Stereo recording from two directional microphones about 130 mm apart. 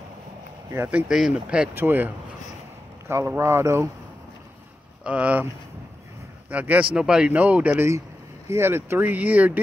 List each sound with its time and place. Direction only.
0.8 s speech: 5° right (ahead or behind)
5.0 s speech: 10° right (ahead or behind)
6.5 s speech: 10° right (ahead or behind)